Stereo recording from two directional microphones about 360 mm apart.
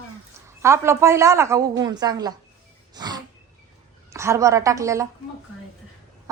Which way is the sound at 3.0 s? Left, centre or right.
Centre.